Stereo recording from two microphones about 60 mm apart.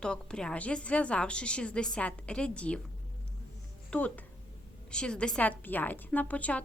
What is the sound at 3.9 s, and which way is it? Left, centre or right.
Speech, left.